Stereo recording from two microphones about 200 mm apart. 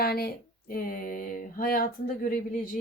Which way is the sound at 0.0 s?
50° left (ahead or behind).